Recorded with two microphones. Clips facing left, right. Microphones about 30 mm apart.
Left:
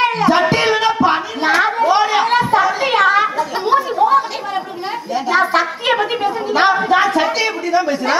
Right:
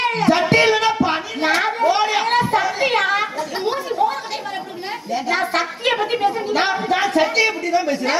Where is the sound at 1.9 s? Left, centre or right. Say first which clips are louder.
Left 4 dB; left.